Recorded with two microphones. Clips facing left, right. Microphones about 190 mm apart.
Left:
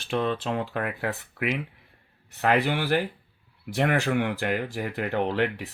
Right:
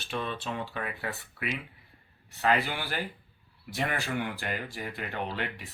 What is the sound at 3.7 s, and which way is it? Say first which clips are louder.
Speech: left 8 dB; 80° left.